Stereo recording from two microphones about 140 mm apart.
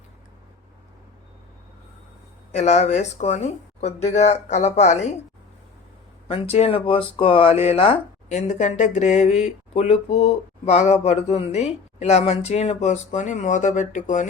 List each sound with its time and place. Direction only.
2.6 s speech: 55° left (ahead or behind)
6.2 s speech: 45° left (ahead or behind); by 14.3 s 65° left (ahead or behind)